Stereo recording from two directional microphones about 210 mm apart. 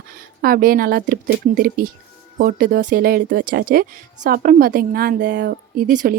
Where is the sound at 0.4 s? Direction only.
45° right (ahead or behind).